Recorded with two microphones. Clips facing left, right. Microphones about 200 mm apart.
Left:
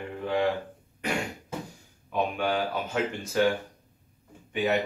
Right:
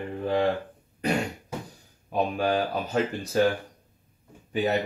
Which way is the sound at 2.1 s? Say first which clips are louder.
Right 2 dB; 35° right (ahead or behind).